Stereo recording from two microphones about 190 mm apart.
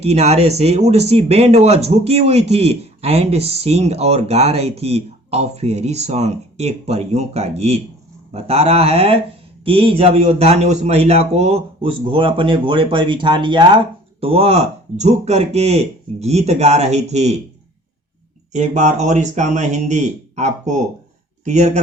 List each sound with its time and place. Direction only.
0.0 s a man's voice: 35° right (ahead or behind)
18.5 s a man's voice: 40° right (ahead or behind)